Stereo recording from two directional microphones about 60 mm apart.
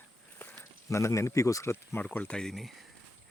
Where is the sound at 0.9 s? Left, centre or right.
Left.